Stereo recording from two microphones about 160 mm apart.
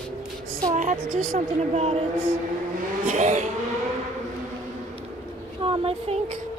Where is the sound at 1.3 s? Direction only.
40° right (ahead or behind).